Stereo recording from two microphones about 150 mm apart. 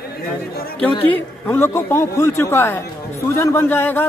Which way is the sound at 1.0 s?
10° left (ahead or behind).